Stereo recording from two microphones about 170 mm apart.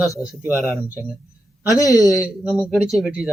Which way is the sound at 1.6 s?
20° left (ahead or behind).